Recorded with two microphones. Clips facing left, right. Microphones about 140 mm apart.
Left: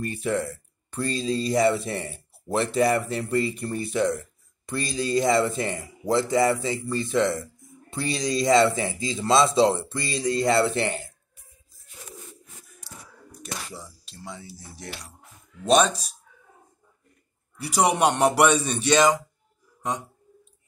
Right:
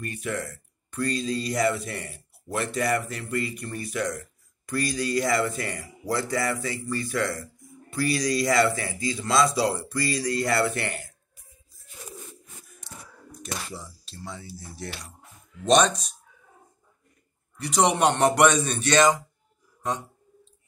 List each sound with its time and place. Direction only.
0.0 s speech: 30° left (ahead or behind)
12.8 s battle cry: 10° left (ahead or behind)
13.7 s speech: 15° left (ahead or behind)
17.6 s speech: 10° left (ahead or behind)